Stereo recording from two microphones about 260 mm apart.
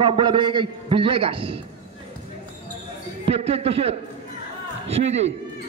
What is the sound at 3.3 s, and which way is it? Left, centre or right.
A man's voice, right.